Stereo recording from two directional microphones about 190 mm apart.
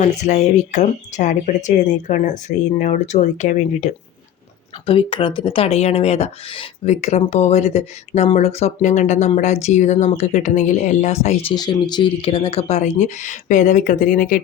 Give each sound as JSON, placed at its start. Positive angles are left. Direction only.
{"t": 0.0, "sound": "speech", "side_deg": 40}
{"t": 4.9, "sound": "speech", "side_deg": 30}
{"t": 11.5, "sound": "speech", "side_deg": 20}